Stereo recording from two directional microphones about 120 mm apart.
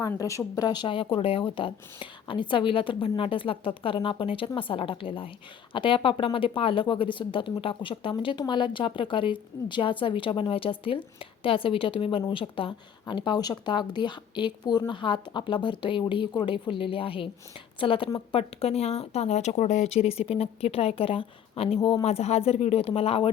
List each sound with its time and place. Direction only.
0.2 s speech: 30° left (ahead or behind); by 23.3 s 50° left (ahead or behind)